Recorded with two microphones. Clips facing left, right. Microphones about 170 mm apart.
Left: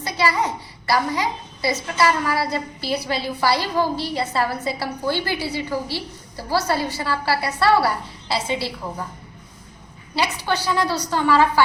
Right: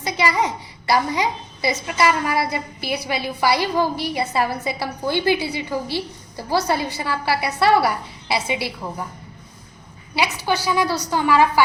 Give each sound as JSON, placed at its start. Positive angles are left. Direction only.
{"t": 0.0, "sound": "a woman's voice", "side_deg": -15}
{"t": 10.2, "sound": "a woman's voice", "side_deg": -10}